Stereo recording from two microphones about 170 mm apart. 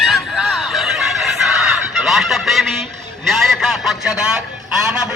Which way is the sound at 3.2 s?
Centre (ahead or behind).